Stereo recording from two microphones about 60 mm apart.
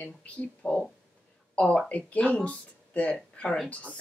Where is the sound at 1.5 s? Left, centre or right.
Left.